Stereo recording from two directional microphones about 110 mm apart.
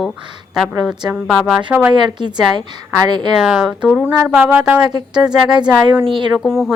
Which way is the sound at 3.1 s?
40° right (ahead or behind).